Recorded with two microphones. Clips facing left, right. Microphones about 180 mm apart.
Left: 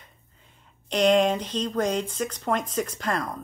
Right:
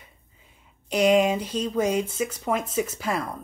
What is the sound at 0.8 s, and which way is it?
Speech, 10° right (ahead or behind).